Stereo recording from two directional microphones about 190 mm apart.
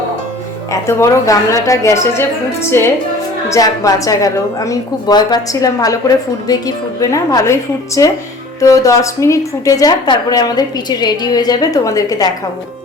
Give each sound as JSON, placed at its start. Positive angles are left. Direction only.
{"t": 0.7, "sound": "a woman's voice", "side_deg": 15}